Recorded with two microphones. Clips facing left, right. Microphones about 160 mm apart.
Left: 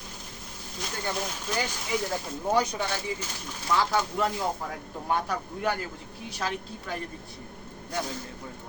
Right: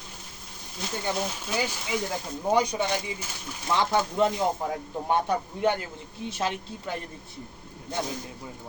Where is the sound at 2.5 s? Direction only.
15° right (ahead or behind).